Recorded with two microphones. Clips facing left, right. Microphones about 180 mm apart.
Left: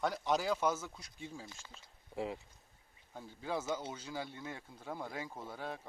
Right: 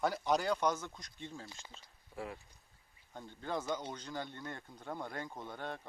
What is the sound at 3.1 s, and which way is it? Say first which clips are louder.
Speech: even; 5° left (ahead or behind).